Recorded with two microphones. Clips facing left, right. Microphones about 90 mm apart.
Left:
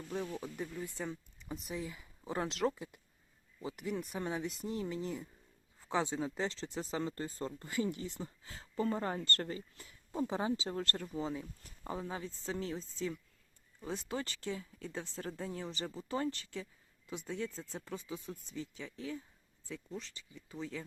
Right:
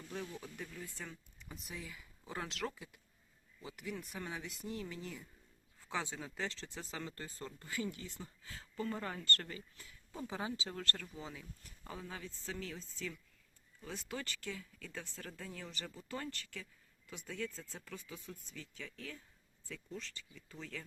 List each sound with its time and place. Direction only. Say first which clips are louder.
0.5 s speech: left 7 dB; 25° left (ahead or behind)